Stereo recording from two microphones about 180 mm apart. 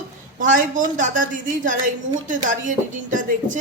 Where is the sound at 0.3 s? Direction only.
45° right (ahead or behind).